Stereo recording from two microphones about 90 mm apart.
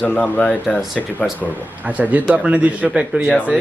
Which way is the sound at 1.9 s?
15° right (ahead or behind).